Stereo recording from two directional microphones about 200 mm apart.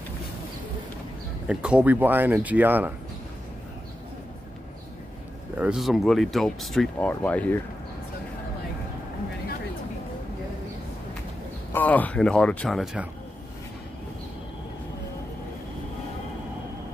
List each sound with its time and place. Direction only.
1.5 s speech: 5° right (ahead or behind)
5.6 s speech: 5° right (ahead or behind)
11.7 s speech: 10° left (ahead or behind)